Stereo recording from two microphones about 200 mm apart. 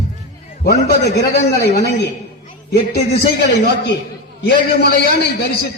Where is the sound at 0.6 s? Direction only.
55° left (ahead or behind).